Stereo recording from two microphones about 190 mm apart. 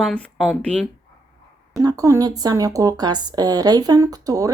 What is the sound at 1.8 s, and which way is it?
Speech, 20° right (ahead or behind).